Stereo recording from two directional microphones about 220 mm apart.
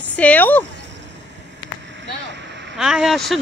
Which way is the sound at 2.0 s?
55° right (ahead or behind).